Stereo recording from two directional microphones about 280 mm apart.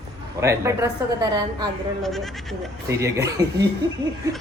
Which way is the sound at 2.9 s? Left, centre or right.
Centre.